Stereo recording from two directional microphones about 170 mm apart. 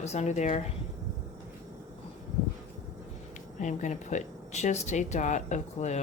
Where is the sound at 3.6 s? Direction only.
45° left (ahead or behind).